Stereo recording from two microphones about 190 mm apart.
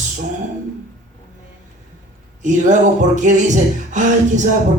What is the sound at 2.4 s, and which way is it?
Music, 40° right (ahead or behind).